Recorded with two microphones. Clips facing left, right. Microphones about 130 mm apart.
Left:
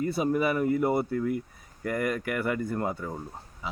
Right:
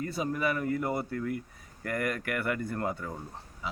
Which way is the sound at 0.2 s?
10° left (ahead or behind).